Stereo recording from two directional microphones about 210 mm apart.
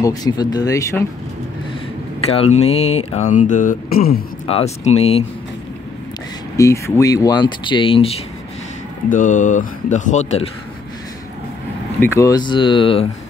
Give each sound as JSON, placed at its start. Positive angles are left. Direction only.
{"t": 0.0, "sound": "speech", "side_deg": 15}
{"t": 2.2, "sound": "speech", "side_deg": 30}
{"t": 4.5, "sound": "speech", "side_deg": 30}
{"t": 6.5, "sound": "speech", "side_deg": 15}
{"t": 9.1, "sound": "speech", "side_deg": 35}
{"t": 12.0, "sound": "speech", "side_deg": 15}